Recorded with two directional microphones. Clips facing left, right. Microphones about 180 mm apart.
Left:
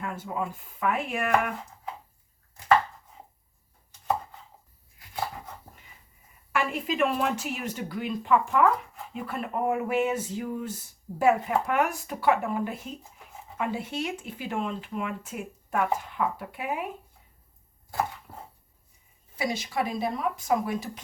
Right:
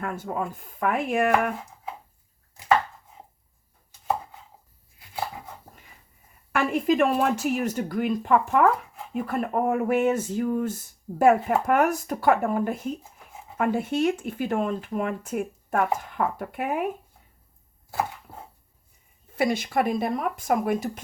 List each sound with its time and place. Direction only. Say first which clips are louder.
0.0 s speech: right 3 dB; 45° right (ahead or behind)
6.5 s speech: right 6 dB; 50° right (ahead or behind)
18.3 s chopping: right 1 dB; 25° right (ahead or behind)
19.4 s speech: right 5 dB; 55° right (ahead or behind)